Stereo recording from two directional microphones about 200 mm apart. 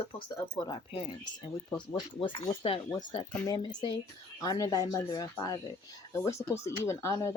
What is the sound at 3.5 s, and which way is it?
Speech, 20° left (ahead or behind).